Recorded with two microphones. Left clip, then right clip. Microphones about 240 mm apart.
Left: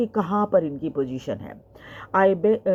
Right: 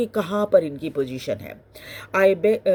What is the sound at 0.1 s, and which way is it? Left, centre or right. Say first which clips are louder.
Speech: right 2 dB; right.